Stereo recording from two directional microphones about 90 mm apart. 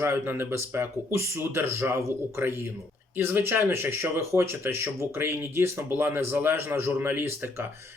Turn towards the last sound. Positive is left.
turn(degrees=-25)  # may be behind; listen again after turning